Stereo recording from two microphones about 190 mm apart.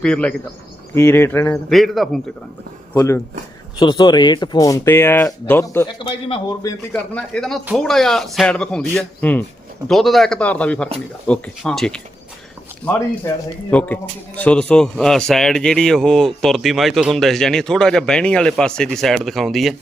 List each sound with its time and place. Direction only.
0.0 s a man's voice: 5° left (ahead or behind)
1.7 s a man's voice: centre (ahead or behind)
2.9 s speech: 15° left (ahead or behind)
6.0 s a man's voice: 25° left (ahead or behind); by 19.7 s centre (ahead or behind)